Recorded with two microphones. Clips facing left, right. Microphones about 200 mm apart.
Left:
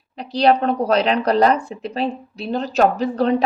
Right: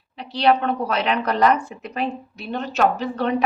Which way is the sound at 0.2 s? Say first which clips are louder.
Left 3 dB; 40° left (ahead or behind).